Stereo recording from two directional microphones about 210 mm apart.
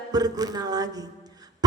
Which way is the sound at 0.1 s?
20° right (ahead or behind).